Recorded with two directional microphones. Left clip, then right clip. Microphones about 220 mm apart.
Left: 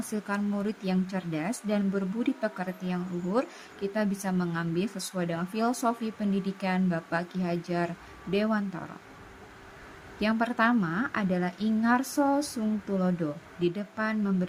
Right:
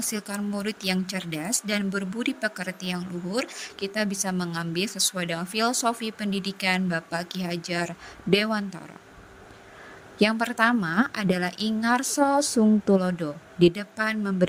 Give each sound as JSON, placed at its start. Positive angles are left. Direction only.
{"t": 0.5, "sound": "speech", "side_deg": -40}
{"t": 10.2, "sound": "speech", "side_deg": -40}